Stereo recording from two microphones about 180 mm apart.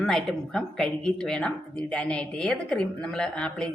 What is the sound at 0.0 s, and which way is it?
A woman's voice, centre (ahead or behind).